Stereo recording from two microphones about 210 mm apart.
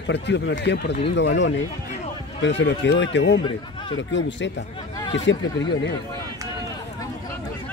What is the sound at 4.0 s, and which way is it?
Speech, 60° left (ahead or behind).